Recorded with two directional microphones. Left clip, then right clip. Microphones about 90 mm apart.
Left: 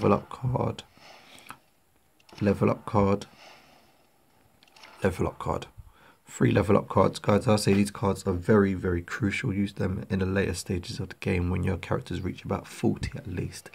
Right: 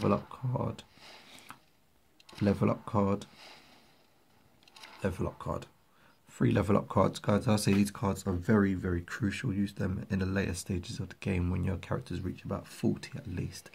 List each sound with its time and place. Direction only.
0.3 s speech: 25° left (ahead or behind)
0.9 s a sound: 35° right (ahead or behind)
1.5 s a sound: 5° left (ahead or behind)
2.4 s speech: centre (ahead or behind)
2.8 s speech: 10° left (ahead or behind)
3.3 s a sound: 35° right (ahead or behind)
4.7 s a sound: 35° right (ahead or behind)
5.0 s speech: 40° left (ahead or behind)
6.5 s speech: 5° left (ahead or behind)
7.2 s speech: 15° left (ahead or behind)
11.5 s speech: 25° left (ahead or behind)
13.0 s speech: 15° left (ahead or behind)